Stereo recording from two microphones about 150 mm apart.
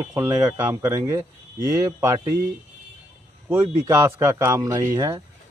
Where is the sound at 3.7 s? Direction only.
20° right (ahead or behind).